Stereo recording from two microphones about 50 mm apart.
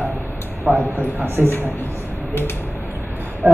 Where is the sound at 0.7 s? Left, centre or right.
Right.